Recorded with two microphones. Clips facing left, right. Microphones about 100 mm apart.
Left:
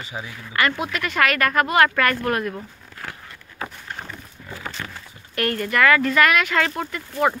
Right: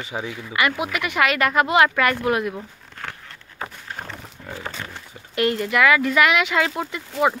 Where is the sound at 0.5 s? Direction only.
10° right (ahead or behind).